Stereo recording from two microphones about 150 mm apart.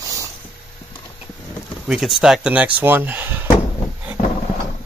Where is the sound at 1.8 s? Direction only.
Centre (ahead or behind).